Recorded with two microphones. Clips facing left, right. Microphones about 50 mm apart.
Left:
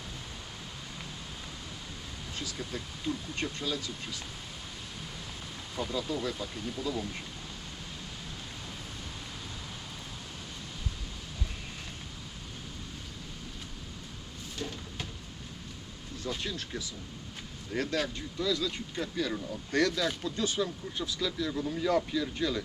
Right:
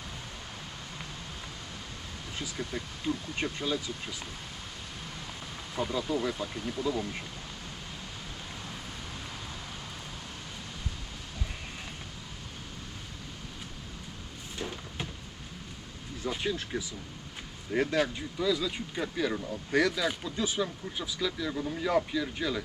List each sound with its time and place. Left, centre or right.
2.3 s speech: centre
5.7 s speech: centre
14.6 s a sound: right
16.2 s speech: centre